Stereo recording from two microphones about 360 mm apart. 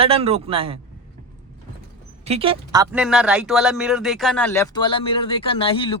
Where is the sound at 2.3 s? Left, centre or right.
Centre.